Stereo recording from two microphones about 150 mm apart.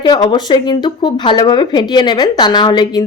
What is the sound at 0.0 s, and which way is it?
Speech, 30° left (ahead or behind).